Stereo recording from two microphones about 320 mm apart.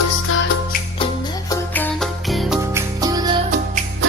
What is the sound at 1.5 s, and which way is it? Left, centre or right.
Music, centre.